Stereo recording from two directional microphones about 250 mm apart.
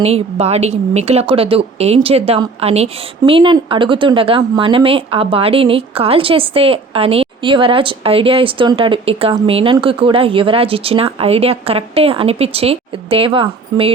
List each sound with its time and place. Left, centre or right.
0.0 s speech: right